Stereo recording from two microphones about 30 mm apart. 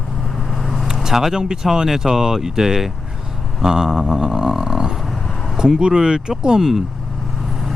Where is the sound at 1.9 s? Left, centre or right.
Centre.